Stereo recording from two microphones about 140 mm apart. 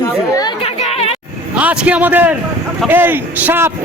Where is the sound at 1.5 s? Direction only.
10° right (ahead or behind).